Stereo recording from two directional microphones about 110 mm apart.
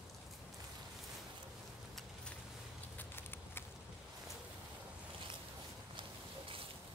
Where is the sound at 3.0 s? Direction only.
20° left (ahead or behind).